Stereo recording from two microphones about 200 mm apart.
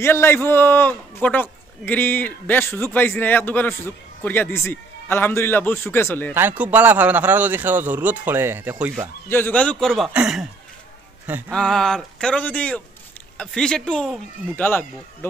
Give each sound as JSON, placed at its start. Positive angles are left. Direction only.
{"t": 0.0, "sound": "a man's voice", "side_deg": 10}
{"t": 6.3, "sound": "a man's voice", "side_deg": -10}
{"t": 9.3, "sound": "a man's voice", "side_deg": 10}
{"t": 11.5, "sound": "speech", "side_deg": 5}